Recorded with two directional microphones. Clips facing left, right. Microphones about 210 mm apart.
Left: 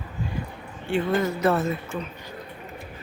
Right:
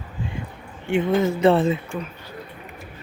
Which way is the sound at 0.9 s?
20° right (ahead or behind).